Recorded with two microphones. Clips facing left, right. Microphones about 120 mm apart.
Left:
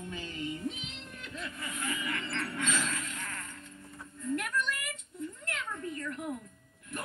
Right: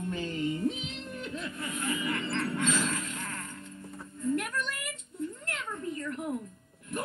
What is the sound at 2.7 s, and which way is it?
Livestock, 25° right (ahead or behind).